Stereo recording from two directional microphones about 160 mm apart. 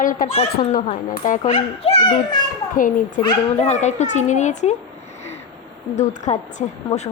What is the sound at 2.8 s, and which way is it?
Speech, 55° left (ahead or behind).